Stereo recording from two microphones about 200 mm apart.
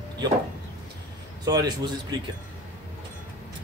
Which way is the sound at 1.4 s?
20° right (ahead or behind).